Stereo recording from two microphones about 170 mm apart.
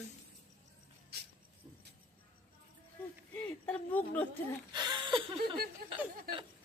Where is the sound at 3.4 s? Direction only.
10° left (ahead or behind).